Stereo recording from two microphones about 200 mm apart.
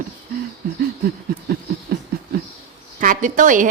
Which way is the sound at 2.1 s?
50° right (ahead or behind).